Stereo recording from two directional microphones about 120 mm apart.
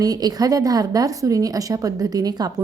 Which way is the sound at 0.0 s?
30° right (ahead or behind).